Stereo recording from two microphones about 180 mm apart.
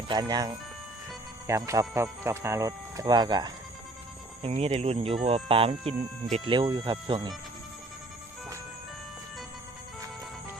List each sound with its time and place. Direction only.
0.1 s speech: 20° right (ahead or behind)
4.4 s speech: 35° right (ahead or behind)